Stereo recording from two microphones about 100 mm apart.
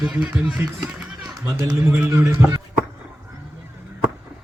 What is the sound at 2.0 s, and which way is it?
Speech, 30° right (ahead or behind).